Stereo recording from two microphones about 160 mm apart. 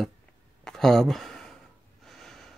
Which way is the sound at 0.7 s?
Centre (ahead or behind).